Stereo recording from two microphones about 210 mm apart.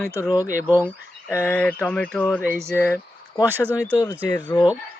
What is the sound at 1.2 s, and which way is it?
Speech, 10° left (ahead or behind).